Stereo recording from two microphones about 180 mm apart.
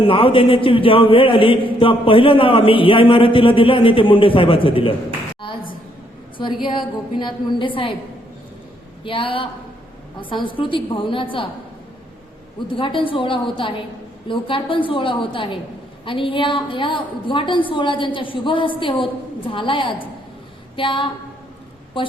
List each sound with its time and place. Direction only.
0.0 s a man's voice: 30° left (ahead or behind)
6.3 s a woman's voice: 25° left (ahead or behind)
9.0 s a man's voice: 30° left (ahead or behind)
12.6 s a man's voice: 30° left (ahead or behind)